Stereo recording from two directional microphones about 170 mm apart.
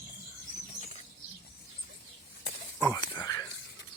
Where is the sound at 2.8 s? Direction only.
15° left (ahead or behind).